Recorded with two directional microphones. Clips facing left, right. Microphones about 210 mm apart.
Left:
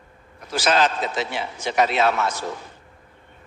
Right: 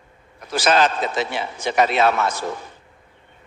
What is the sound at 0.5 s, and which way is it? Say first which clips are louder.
A man's voice: right 2 dB; 55° right (ahead or behind).